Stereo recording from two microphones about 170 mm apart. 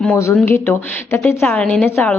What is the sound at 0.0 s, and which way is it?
A woman's voice, 15° left (ahead or behind).